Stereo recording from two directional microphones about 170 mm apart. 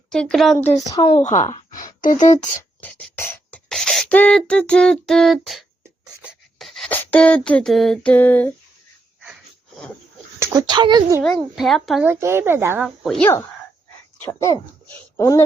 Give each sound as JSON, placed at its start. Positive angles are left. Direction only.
{"t": 0.1, "sound": "beatboxing", "side_deg": 5}
{"t": 0.9, "sound": "a woman's voice", "side_deg": 20}
{"t": 1.8, "sound": "speech", "side_deg": 50}
{"t": 2.8, "sound": "beatboxing", "side_deg": 10}
{"t": 6.2, "sound": "a sound", "side_deg": 0}
{"t": 10.4, "sound": "speech", "side_deg": -20}
{"t": 11.2, "sound": "beatboxing", "side_deg": 0}
{"t": 12.0, "sound": "speech", "side_deg": -15}
{"t": 12.8, "sound": "beatboxing", "side_deg": 0}
{"t": 14.2, "sound": "speech", "side_deg": 15}